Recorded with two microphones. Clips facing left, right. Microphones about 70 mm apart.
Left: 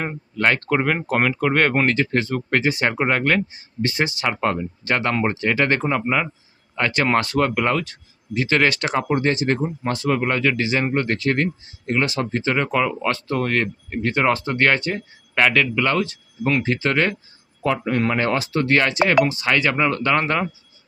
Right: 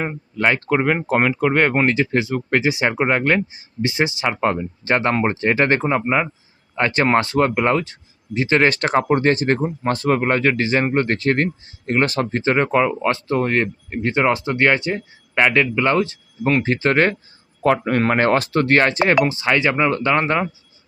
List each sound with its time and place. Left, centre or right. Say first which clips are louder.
0.0 s speech: right 1 dB; centre
8.7 s speech: right 4 dB; right
17.6 s speech: right 4 dB; right
18.8 s speech: left 1 dB; right
19.5 s speech: right 2 dB; centre